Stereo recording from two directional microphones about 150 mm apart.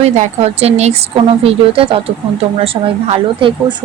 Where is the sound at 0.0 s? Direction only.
45° right (ahead or behind).